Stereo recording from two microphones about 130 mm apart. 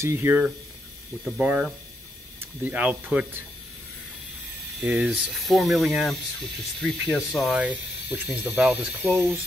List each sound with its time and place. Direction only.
0.0 s speech: 20° right (ahead or behind)
1.4 s speech: 10° right (ahead or behind)
4.8 s speech: 5° right (ahead or behind)
7.6 s speech: 10° right (ahead or behind)